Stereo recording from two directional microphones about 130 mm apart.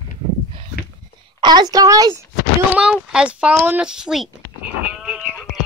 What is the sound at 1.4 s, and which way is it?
Speech, 30° right (ahead or behind).